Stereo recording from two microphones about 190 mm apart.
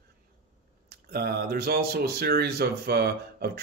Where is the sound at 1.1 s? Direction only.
55° right (ahead or behind).